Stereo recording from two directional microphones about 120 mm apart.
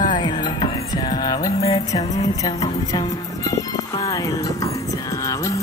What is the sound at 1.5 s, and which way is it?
Music, 55° left (ahead or behind).